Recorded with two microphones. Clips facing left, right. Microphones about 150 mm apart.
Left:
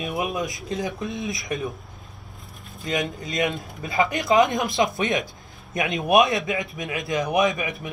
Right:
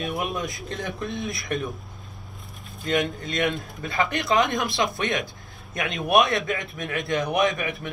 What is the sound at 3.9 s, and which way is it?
Speech, 20° left (ahead or behind).